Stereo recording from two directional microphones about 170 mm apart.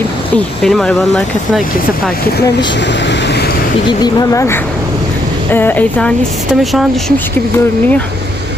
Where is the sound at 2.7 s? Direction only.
90° left.